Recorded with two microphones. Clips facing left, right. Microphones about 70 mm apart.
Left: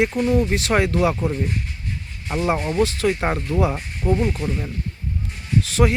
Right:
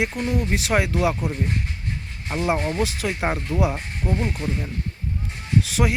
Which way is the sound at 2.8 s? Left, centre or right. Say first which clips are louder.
Left 4 dB; centre.